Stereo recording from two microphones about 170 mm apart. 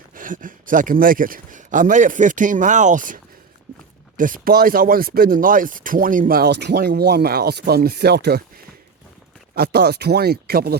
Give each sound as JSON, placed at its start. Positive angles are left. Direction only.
{"t": 0.1, "sound": "speech", "side_deg": -50}
{"t": 4.2, "sound": "speech", "side_deg": -55}
{"t": 9.6, "sound": "speech", "side_deg": -70}